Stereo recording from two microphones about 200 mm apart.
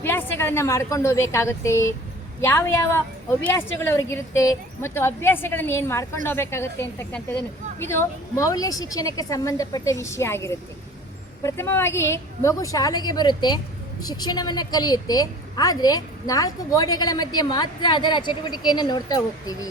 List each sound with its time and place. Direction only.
0.0 s a woman's voice: 10° left (ahead or behind)